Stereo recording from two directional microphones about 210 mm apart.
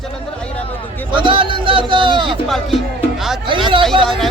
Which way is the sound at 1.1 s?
25° right (ahead or behind).